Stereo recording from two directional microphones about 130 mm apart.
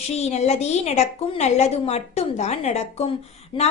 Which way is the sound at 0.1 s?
60° left (ahead or behind).